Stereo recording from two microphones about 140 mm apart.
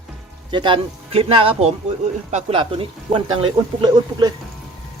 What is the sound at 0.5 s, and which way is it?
Speech, 35° right (ahead or behind).